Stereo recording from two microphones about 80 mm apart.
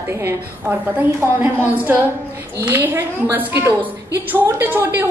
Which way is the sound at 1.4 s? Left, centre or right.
Right.